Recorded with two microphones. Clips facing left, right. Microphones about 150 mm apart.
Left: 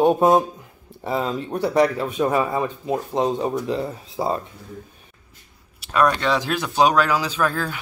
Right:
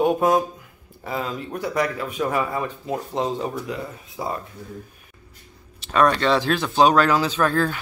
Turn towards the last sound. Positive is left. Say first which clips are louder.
# right 2 dB
turn(degrees=5)  # may be behind; listen again after turning